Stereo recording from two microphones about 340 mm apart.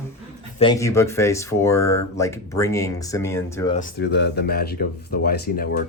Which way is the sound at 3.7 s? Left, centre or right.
Left.